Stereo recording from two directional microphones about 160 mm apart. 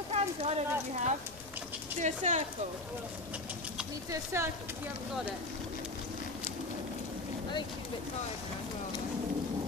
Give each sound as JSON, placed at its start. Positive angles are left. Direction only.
{"t": 0.1, "sound": "speech", "side_deg": -40}
{"t": 4.1, "sound": "speech", "side_deg": -15}